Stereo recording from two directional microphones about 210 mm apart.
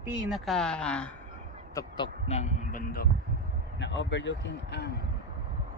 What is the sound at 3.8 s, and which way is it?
A man's voice, 60° left (ahead or behind).